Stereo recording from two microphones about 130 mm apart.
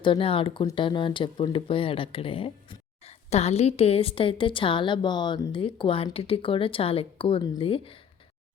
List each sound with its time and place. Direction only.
0.0 s speech: 40° left (ahead or behind)